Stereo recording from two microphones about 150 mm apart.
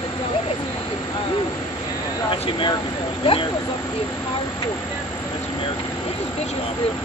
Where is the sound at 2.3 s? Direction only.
35° left (ahead or behind).